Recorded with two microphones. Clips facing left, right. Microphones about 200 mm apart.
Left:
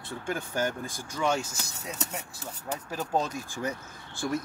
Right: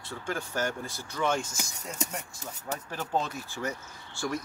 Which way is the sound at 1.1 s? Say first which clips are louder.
Left 1 dB; 10° left (ahead or behind).